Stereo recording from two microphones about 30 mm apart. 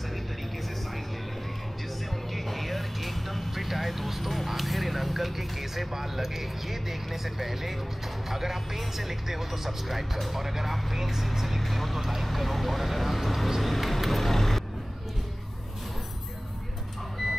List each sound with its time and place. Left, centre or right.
2.3 s vehicle: centre
4.5 s speech: centre